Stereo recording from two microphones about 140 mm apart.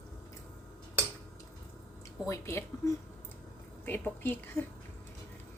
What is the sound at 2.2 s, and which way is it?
Speech, 20° left (ahead or behind).